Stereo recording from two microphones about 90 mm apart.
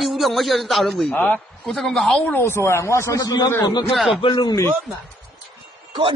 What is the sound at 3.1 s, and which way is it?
Speech, 45° left (ahead or behind).